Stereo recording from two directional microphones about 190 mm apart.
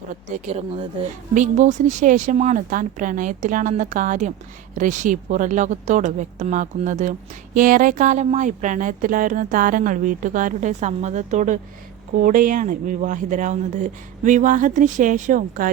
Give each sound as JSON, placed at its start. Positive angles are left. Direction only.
{"t": 0.1, "sound": "speech", "side_deg": -40}